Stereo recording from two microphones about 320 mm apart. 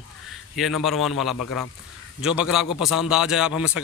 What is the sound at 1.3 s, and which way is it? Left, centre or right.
Speech, left.